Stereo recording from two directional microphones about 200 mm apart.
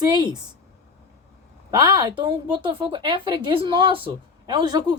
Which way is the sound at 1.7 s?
20° right (ahead or behind).